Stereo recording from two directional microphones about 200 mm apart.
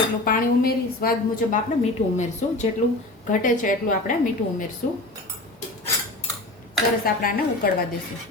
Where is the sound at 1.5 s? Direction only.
35° left (ahead or behind).